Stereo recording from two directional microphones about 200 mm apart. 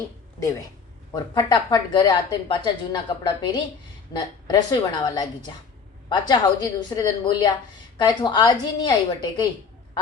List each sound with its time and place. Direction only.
0.3 s a woman's voice: 15° left (ahead or behind)